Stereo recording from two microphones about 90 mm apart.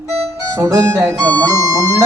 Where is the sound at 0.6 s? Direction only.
35° right (ahead or behind).